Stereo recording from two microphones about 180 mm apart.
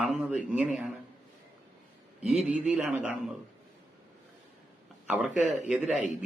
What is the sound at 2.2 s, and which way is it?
A man's voice, centre (ahead or behind).